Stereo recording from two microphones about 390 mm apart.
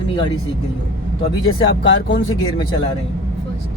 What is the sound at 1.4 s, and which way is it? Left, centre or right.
Speech, left.